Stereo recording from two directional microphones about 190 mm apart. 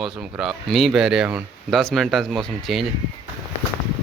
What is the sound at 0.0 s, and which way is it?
Speech, centre (ahead or behind).